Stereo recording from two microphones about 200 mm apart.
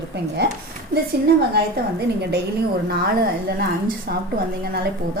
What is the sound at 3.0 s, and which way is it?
Speech, 50° right (ahead or behind).